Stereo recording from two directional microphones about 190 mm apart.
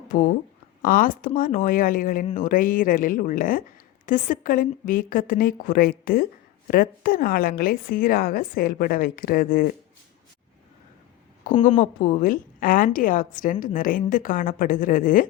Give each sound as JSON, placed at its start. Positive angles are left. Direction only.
{"t": 0.8, "sound": "a woman's voice", "side_deg": 45}
{"t": 11.8, "sound": "a woman's voice", "side_deg": 45}